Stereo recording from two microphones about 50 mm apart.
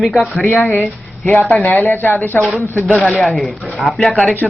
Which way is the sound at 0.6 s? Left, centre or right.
Left.